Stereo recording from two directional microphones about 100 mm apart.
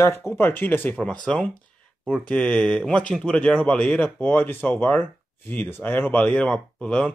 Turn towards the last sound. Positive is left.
turn(degrees=10)  # may be behind; listen again after turning